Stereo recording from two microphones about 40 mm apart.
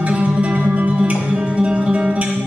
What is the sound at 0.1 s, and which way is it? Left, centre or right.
Music, right.